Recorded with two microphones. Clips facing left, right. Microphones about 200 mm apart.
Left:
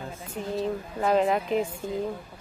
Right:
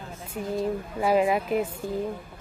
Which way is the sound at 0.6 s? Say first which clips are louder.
Right 1 dB; 10° right (ahead or behind).